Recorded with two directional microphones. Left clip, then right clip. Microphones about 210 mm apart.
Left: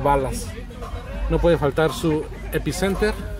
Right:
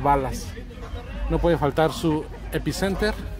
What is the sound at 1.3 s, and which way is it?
Speech, centre (ahead or behind).